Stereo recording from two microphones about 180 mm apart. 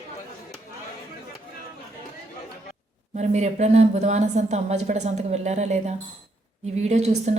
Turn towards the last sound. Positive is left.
turn(degrees=-40)  # may be behind; listen again after turning